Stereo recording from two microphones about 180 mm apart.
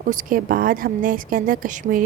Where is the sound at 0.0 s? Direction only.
50° right (ahead or behind).